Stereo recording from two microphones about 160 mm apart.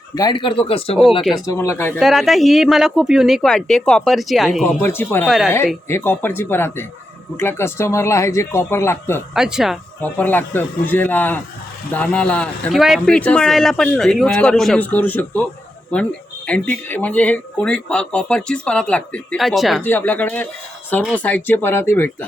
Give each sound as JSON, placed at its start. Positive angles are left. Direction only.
{"t": 0.2, "sound": "speech", "side_deg": 30}
{"t": 1.5, "sound": "speech", "side_deg": 15}
{"t": 2.0, "sound": "speech", "side_deg": 0}
{"t": 4.6, "sound": "speech", "side_deg": 15}
{"t": 9.3, "sound": "speech", "side_deg": -5}
{"t": 10.0, "sound": "speech", "side_deg": 10}
{"t": 19.8, "sound": "speech", "side_deg": 10}